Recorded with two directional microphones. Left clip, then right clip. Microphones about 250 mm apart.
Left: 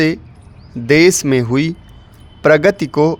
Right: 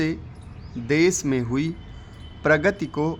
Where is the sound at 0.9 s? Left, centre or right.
Left.